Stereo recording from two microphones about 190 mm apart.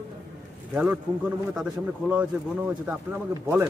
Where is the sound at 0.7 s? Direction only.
5° right (ahead or behind).